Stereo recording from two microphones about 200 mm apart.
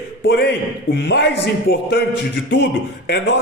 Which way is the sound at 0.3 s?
55° left (ahead or behind).